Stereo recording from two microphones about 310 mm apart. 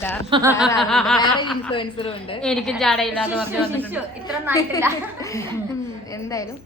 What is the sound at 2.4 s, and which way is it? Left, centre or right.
A woman's voice, centre.